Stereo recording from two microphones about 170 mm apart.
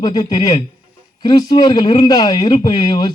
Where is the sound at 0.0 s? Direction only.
25° left (ahead or behind).